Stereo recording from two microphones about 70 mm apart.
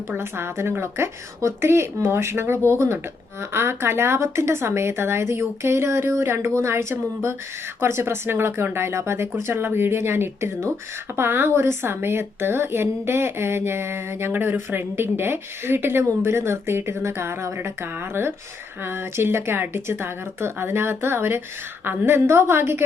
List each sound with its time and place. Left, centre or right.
0.2 s a woman's voice: right